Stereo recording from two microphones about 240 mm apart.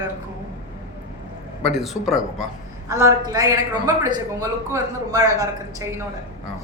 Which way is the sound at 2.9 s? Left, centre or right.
Centre.